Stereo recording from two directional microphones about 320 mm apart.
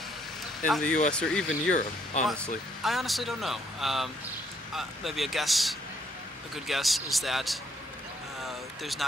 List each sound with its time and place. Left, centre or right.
0.7 s speech: centre
1.7 s speech: left
2.2 s speech: centre
8.4 s a sound: centre